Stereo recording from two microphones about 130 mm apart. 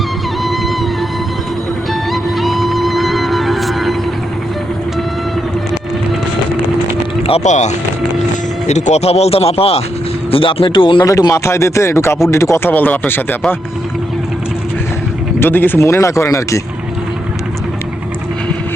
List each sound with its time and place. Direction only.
0.4 s music: centre (ahead or behind)
2.4 s music: centre (ahead or behind)
7.3 s speech: 60° left (ahead or behind); by 11.0 s 40° left (ahead or behind)
11.0 s a man's voice: 25° left (ahead or behind)
15.4 s a man's voice: 15° left (ahead or behind)